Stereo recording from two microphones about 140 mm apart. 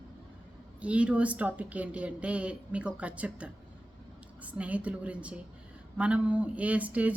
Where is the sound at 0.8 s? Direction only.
10° right (ahead or behind).